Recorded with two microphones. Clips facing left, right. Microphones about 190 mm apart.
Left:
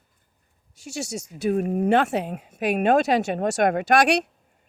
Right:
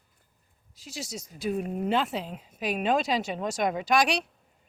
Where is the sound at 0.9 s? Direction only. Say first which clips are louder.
Left 7 dB; 70° left (ahead or behind).